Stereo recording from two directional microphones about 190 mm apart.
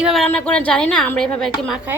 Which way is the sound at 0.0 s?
Centre (ahead or behind).